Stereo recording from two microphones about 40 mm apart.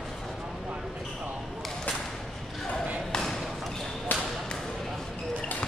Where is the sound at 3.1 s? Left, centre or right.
Centre.